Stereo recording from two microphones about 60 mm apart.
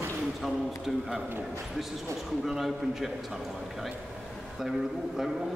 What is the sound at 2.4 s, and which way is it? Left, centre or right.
A man's voice, centre.